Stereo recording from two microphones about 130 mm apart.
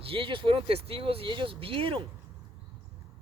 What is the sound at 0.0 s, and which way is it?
Speech, 45° right (ahead or behind).